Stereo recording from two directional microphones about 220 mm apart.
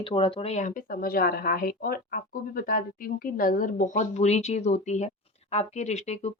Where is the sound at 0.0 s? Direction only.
25° left (ahead or behind).